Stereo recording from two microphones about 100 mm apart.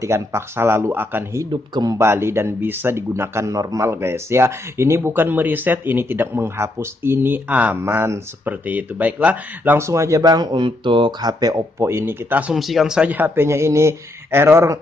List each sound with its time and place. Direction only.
0.0 s speech: 25° right (ahead or behind)
1.5 s speech: 45° right (ahead or behind)
2.0 s speech: 25° right (ahead or behind)
9.8 s speech: 30° right (ahead or behind)
11.9 s speech: 25° right (ahead or behind)
12.5 s speech: centre (ahead or behind); by 14.8 s 25° right (ahead or behind)